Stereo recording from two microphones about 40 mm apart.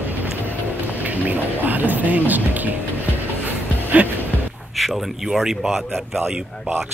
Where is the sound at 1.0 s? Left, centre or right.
Right.